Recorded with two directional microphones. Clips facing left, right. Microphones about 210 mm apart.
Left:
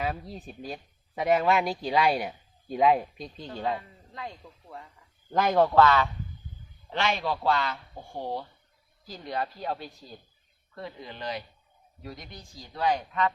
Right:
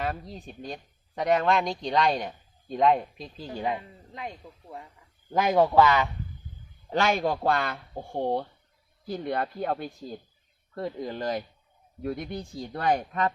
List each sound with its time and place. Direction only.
0.0 s speech: centre (ahead or behind); by 4.8 s 20° right (ahead or behind)
5.3 s speech: 5° right (ahead or behind)
6.9 s speech: 45° right (ahead or behind)
12.0 s speech: 55° right (ahead or behind)